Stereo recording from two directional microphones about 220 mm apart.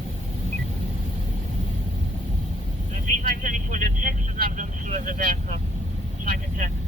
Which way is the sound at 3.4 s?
35° right (ahead or behind).